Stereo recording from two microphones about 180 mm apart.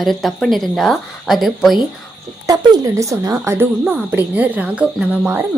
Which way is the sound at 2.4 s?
20° right (ahead or behind).